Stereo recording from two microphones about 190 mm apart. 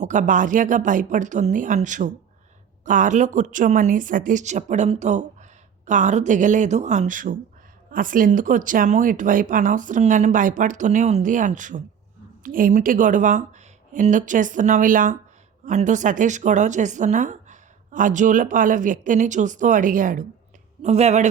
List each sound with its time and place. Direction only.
0.0 s a woman's voice: 40° right (ahead or behind)